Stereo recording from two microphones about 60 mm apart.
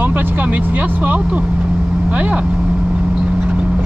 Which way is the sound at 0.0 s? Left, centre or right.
Right.